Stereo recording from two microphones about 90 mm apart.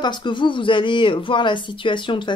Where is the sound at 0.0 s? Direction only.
60° left (ahead or behind).